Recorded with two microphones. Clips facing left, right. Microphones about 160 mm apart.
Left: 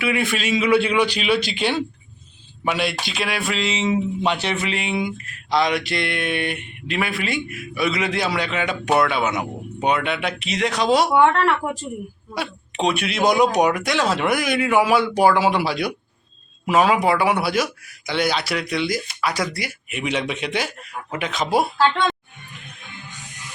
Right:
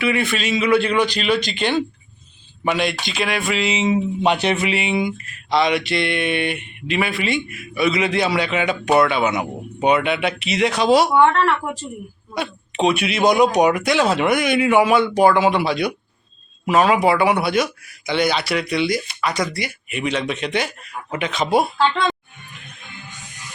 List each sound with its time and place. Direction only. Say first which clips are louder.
0.0 s a man's voice: right 2 dB; 10° left (ahead or behind)
2.6 s mantra: right 2 dB; 5° left (ahead or behind); by 4.7 s 15° right (ahead or behind)
4.7 s mantra: right 3 dB; centre (ahead or behind)